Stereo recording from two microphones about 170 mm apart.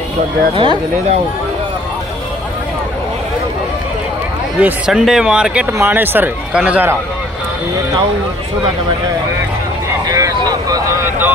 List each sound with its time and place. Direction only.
0.6 s speech: 30° right (ahead or behind)
4.6 s speech: 5° right (ahead or behind)
10.0 s vehicle: 20° right (ahead or behind)